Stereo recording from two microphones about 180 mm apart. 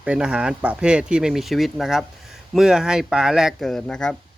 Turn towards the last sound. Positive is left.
turn(degrees=5)  # may be behind; listen again after turning